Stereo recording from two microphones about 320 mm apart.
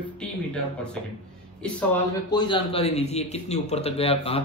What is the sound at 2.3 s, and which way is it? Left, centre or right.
A man's voice, centre.